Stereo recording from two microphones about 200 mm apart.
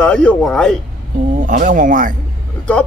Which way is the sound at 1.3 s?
40° right (ahead or behind).